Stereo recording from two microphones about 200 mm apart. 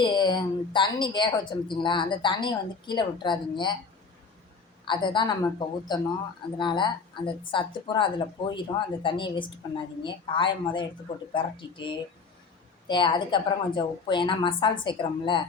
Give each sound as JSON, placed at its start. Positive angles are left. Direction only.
{"t": 0.0, "sound": "speech", "side_deg": 20}
{"t": 4.9, "sound": "speech", "side_deg": 25}